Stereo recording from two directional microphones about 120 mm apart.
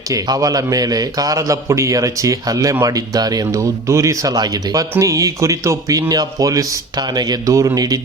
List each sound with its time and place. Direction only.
0.1 s a man's voice: 30° right (ahead or behind)